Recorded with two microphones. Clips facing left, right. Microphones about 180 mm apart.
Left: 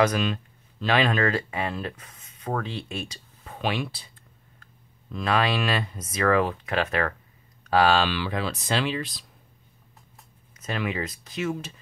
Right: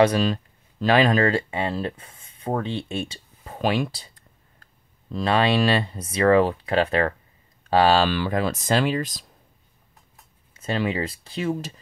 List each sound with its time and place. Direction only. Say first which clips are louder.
0.0 s speech: right 4 dB; 35° right (ahead or behind)
3.5 s speech: right 5 dB; 40° right (ahead or behind)
5.1 s speech: right 4 dB; 30° right (ahead or behind); by 9.2 s 45° right (ahead or behind)
10.5 s speech: right 5 dB; 30° right (ahead or behind)